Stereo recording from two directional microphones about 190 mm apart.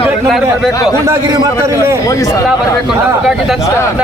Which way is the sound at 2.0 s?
15° left (ahead or behind).